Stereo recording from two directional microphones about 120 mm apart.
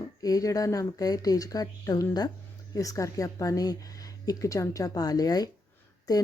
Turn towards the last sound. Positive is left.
turn(degrees=30)  # may be behind; listen again after turning